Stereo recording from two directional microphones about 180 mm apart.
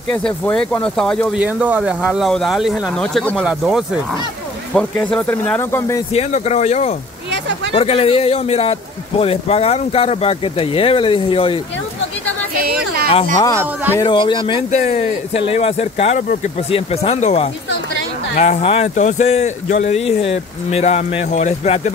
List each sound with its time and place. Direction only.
0.1 s speech: 5° left (ahead or behind)
1.4 s speech: 10° right (ahead or behind); by 6.0 s 15° left (ahead or behind)
6.1 s a man's voice: 35° left (ahead or behind)
7.2 s a sound: 75° right (ahead or behind)
7.7 s a man's voice: 35° left (ahead or behind)
12.5 s a sound: 60° right (ahead or behind)
14.0 s speech: 25° left (ahead or behind)
14.7 s a man's voice: 40° left (ahead or behind)